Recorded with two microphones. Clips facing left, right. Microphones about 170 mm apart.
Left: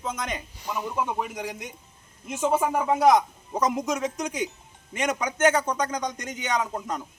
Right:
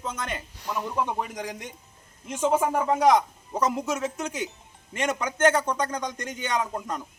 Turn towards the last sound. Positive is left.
turn(degrees=10)  # may be behind; listen again after turning